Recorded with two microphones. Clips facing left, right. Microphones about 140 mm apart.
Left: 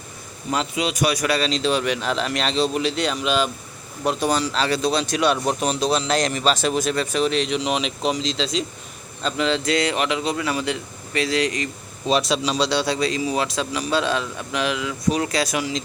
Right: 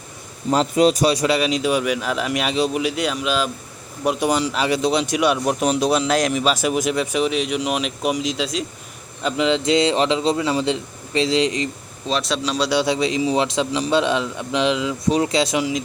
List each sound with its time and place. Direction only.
0.5 s speech: 40° right (ahead or behind)
1.4 s speech: 15° right (ahead or behind)
4.0 s a man's voice: 15° right (ahead or behind)
12.3 s a man's voice: centre (ahead or behind)
12.7 s a man's voice: 20° right (ahead or behind)